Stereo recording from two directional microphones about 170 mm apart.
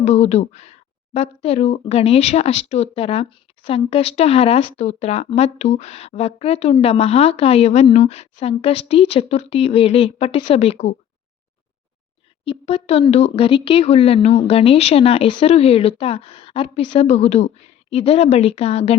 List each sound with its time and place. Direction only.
0.0 s speech: 40° left (ahead or behind)
12.5 s speech: 35° left (ahead or behind)